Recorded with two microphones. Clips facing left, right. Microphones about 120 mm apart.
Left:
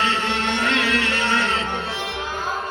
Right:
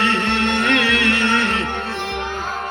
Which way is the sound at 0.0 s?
60° right (ahead or behind).